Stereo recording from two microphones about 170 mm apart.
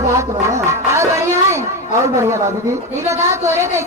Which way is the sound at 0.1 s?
15° right (ahead or behind).